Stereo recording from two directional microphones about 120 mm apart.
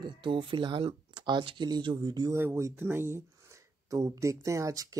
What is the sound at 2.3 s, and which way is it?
Speech, 20° right (ahead or behind).